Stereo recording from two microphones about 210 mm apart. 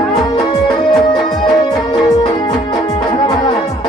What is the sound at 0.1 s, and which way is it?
Music, 20° left (ahead or behind).